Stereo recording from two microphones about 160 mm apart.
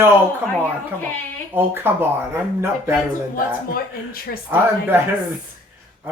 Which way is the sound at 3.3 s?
65° left (ahead or behind).